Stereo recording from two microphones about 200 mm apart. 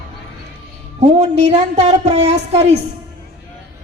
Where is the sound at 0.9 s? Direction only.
35° right (ahead or behind).